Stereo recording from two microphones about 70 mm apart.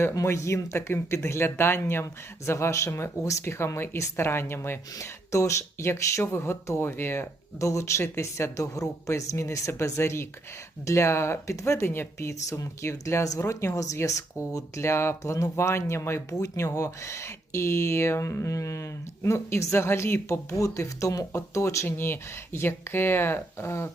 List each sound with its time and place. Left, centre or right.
0.3 s speech: left
4.9 s speech: left
16.4 s speech: left